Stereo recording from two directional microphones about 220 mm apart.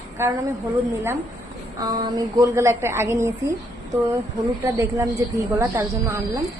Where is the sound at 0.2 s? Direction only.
10° right (ahead or behind).